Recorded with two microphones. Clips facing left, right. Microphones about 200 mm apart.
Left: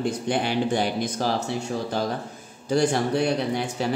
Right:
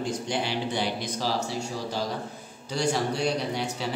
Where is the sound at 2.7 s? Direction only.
55° left (ahead or behind).